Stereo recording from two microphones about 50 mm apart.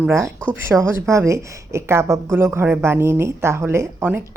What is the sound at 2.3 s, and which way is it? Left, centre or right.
A woman's voice, right.